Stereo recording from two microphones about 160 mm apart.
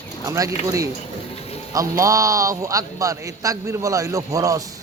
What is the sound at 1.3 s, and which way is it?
Music, 40° left (ahead or behind).